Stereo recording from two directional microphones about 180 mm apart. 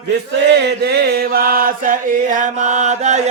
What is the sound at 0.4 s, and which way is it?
Chant, 70° right (ahead or behind).